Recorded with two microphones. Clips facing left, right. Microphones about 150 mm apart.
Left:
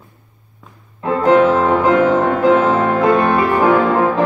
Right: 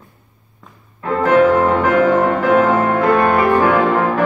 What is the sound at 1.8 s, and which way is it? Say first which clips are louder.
Music: even; 20° left (ahead or behind).